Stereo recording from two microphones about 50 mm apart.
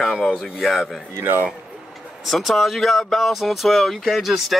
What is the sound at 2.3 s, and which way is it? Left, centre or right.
Speech, centre.